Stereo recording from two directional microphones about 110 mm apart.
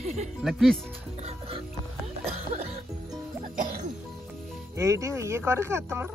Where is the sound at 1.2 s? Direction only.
60° right (ahead or behind).